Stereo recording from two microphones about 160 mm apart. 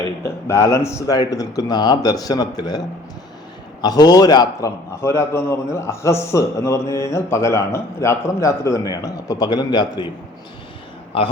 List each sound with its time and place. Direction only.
0.2 s a man's voice: 15° left (ahead or behind)
11.1 s a man's voice: 35° left (ahead or behind)